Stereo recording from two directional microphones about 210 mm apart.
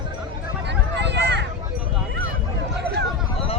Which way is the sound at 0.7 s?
55° right (ahead or behind).